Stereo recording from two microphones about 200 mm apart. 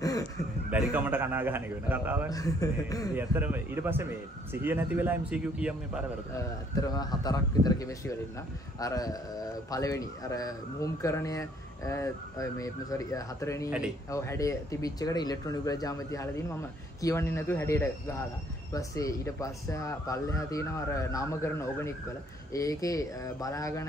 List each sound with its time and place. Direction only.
0.7 s a man's voice: 5° right (ahead or behind)
2.3 s a man's voice: 15° left (ahead or behind)
3.2 s a man's voice: 10° right (ahead or behind)
6.3 s a man's voice: 15° left (ahead or behind)
13.7 s speech: 5° right (ahead or behind)
14.1 s a man's voice: 15° left (ahead or behind)